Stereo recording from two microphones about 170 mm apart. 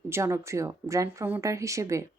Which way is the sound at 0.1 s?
15° right (ahead or behind).